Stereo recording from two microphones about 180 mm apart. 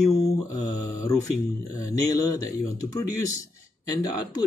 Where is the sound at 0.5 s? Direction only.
20° left (ahead or behind).